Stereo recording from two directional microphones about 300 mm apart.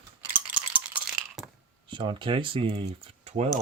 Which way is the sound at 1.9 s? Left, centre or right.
Centre.